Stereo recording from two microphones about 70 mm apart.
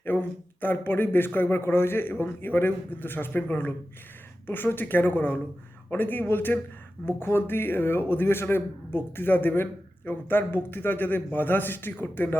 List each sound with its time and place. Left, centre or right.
0.0 s a man's voice: left